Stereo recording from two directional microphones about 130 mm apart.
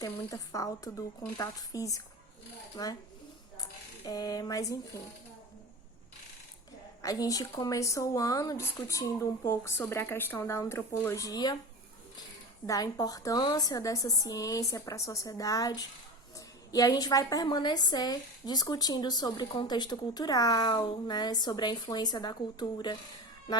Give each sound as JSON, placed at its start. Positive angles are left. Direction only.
{"t": 0.0, "sound": "a woman's voice", "side_deg": 25}
{"t": 4.0, "sound": "speech", "side_deg": 30}
{"t": 7.0, "sound": "speech", "side_deg": 25}
{"t": 12.6, "sound": "a woman's voice", "side_deg": 25}